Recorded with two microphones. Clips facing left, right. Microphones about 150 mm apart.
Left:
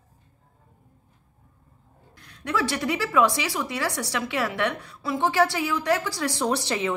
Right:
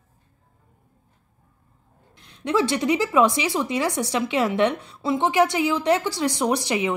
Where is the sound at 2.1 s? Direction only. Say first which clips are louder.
Right 5 dB; 25° right (ahead or behind).